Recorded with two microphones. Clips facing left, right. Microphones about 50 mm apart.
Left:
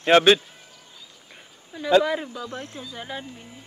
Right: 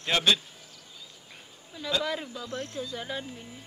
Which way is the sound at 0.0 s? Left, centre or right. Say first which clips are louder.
Left 10 dB; left.